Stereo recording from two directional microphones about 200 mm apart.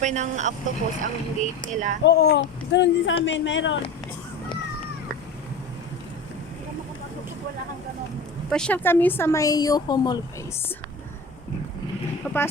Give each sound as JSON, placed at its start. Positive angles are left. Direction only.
{"t": 0.0, "sound": "speech", "side_deg": -35}
{"t": 2.0, "sound": "speech", "side_deg": 55}
{"t": 8.4, "sound": "speech", "side_deg": 5}
{"t": 12.2, "sound": "speech", "side_deg": 5}